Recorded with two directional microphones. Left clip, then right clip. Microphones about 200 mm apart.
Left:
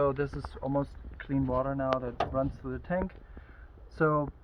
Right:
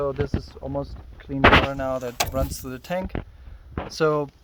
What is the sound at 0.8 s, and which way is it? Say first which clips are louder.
Speech: right 2 dB; 65° right (ahead or behind).